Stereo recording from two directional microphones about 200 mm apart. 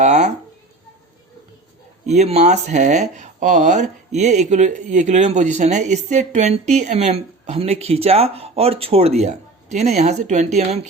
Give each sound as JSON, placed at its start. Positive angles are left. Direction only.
{"t": 0.0, "sound": "speech", "side_deg": -35}
{"t": 2.0, "sound": "speech", "side_deg": -35}